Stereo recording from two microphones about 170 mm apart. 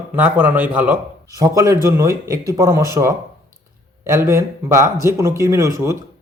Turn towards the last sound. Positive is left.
turn(degrees=-15)  # may be behind; listen again after turning